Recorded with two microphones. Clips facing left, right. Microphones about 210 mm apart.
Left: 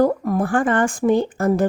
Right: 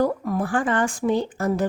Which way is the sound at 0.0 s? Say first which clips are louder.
Left 4 dB; 50° left (ahead or behind).